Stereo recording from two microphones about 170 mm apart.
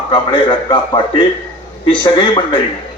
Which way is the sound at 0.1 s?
30° left (ahead or behind).